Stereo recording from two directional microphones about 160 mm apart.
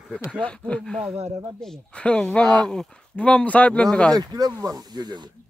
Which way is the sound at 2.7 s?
5° left (ahead or behind).